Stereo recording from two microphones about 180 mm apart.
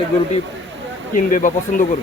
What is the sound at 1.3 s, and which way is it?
Speech, 45° left (ahead or behind).